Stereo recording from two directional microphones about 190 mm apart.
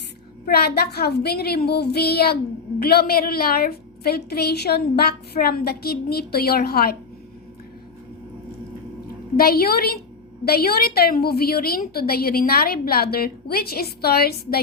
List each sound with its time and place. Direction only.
0.4 s a woman's voice: 55° left (ahead or behind)
9.4 s a woman's voice: 55° left (ahead or behind)